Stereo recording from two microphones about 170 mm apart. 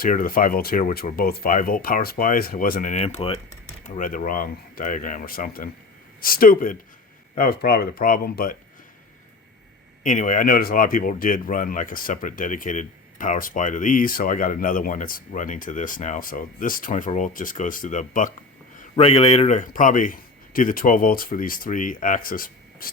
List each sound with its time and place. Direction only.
0.0 s speech: 55° left (ahead or behind); by 3.4 s 35° left (ahead or behind)
3.8 s speech: 50° left (ahead or behind)
10.0 s speech: 50° left (ahead or behind)
18.8 s speech: 35° left (ahead or behind); by 22.9 s 55° left (ahead or behind)